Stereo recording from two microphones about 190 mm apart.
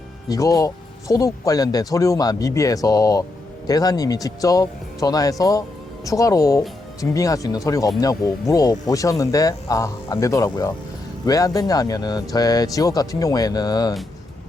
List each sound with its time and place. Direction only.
0.3 s speech: 20° left (ahead or behind)